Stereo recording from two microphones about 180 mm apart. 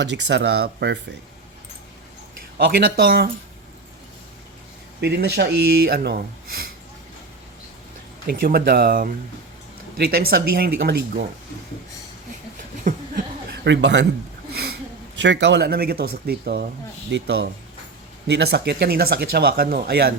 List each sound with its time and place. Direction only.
0.0 s speech: 75° right (ahead or behind)
2.6 s speech: 55° right (ahead or behind)
4.9 s speech: 65° right (ahead or behind)
8.3 s speech: 55° right (ahead or behind)
12.9 s speech: 45° right (ahead or behind)
13.7 s speech: 85° right
15.2 s speech: 75° right (ahead or behind); by 20.1 s 55° right (ahead or behind)